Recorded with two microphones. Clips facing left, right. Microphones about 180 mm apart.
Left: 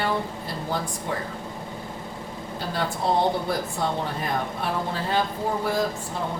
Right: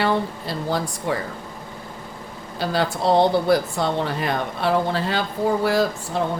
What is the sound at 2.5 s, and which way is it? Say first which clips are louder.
Speech: right 6 dB; 85° right.